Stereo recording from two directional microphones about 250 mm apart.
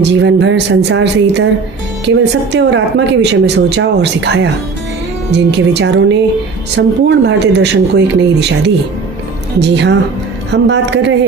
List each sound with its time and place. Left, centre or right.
0.0 s a woman's voice: right